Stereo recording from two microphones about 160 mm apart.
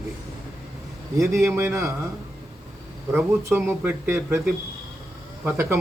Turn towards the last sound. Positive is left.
turn(degrees=-15)  # may be behind; listen again after turning